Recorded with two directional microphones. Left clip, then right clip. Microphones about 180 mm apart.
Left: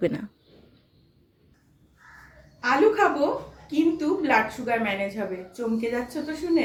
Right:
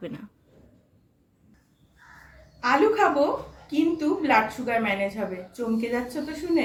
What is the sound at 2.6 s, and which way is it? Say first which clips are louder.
A woman's voice: even; 5° right (ahead or behind).